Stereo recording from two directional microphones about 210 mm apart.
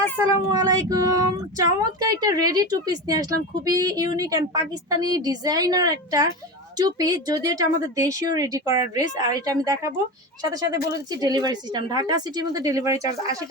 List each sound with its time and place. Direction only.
0.3 s speech: 20° right (ahead or behind)